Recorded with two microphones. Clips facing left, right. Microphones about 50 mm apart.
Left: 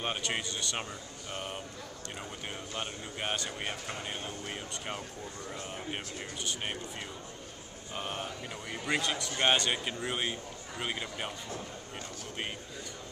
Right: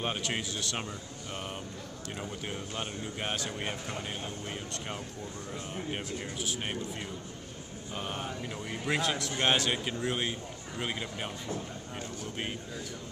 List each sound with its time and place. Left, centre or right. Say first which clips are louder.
0.0 s a man's voice: right 1 dB; centre
7.9 s a man's voice: right 1 dB; centre